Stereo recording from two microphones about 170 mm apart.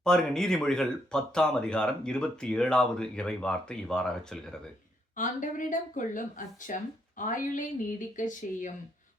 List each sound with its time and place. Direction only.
0.0 s speech: 5° left (ahead or behind)
5.1 s speech: 50° left (ahead or behind)